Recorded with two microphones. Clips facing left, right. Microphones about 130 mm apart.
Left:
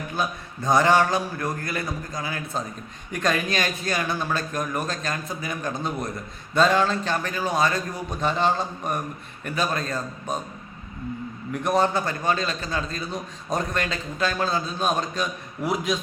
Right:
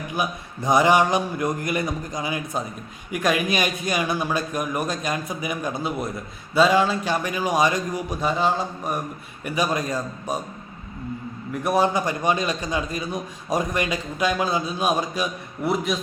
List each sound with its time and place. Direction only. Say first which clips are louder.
0.1 s a man's voice: right 2 dB; 15° right (ahead or behind)
11.5 s a man's voice: right 1 dB; 5° right (ahead or behind)